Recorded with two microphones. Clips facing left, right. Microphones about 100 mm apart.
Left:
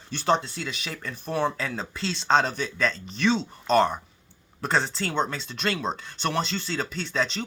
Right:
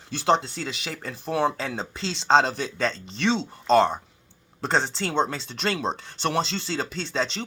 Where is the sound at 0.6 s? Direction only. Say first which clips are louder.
Right 1 dB; 35° right (ahead or behind).